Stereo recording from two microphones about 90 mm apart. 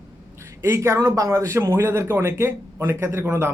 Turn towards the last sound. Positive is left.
turn(degrees=-25)  # may be behind; listen again after turning